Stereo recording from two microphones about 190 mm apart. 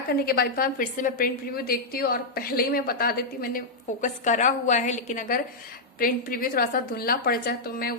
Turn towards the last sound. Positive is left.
turn(degrees=55)  # may be behind; listen again after turning